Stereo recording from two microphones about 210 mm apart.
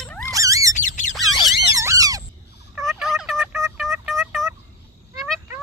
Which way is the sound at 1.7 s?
15° right (ahead or behind).